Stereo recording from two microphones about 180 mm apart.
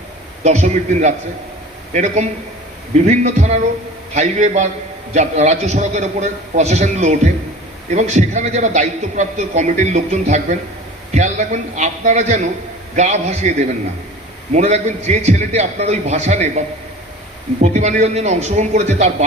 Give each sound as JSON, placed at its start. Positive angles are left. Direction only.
{"t": 0.4, "sound": "a man's voice", "side_deg": -40}